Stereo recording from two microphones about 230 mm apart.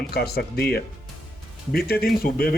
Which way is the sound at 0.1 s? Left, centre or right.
Left.